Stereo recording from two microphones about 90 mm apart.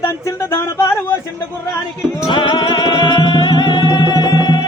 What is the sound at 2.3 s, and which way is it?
Music, 60° left (ahead or behind).